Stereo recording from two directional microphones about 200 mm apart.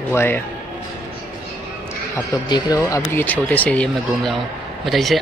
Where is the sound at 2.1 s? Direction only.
15° left (ahead or behind).